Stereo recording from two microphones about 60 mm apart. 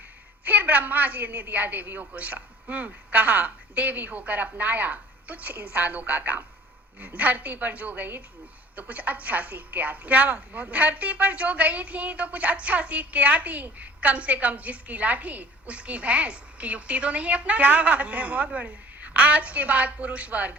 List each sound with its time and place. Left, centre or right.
0.4 s a woman's voice: right